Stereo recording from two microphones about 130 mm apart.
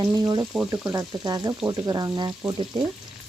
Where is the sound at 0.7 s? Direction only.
25° right (ahead or behind).